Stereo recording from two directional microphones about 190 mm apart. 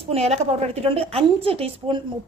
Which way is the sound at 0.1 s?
30° right (ahead or behind).